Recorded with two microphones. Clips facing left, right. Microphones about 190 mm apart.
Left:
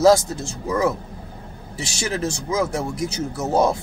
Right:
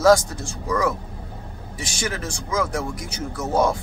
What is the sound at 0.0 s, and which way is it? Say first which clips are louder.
Speech: left 1 dB; 25° left (ahead or behind).